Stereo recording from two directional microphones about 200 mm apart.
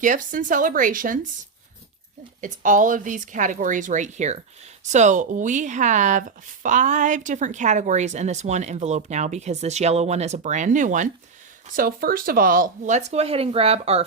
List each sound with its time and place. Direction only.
0.0 s speech: 40° right (ahead or behind)